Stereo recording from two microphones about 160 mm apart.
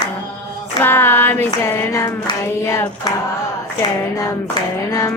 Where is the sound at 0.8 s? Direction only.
15° left (ahead or behind).